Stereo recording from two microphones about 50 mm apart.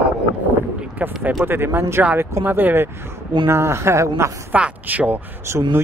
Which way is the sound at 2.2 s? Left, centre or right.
Right.